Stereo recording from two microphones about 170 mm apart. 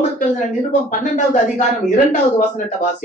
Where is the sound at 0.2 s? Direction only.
50° left (ahead or behind).